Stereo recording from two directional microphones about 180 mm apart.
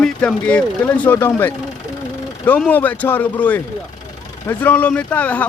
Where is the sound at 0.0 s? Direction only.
5° left (ahead or behind).